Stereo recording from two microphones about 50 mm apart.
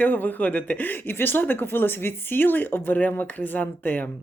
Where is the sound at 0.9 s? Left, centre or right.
Left.